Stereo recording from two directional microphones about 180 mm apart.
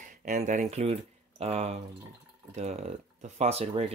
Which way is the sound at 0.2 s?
40° right (ahead or behind).